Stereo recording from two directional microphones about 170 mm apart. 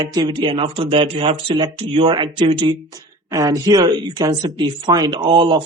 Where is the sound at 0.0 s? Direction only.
25° right (ahead or behind).